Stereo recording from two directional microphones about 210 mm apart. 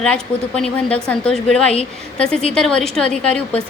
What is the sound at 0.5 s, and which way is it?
A woman's voice, 5° left (ahead or behind).